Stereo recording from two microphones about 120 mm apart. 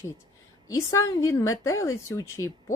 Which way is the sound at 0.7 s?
25° left (ahead or behind).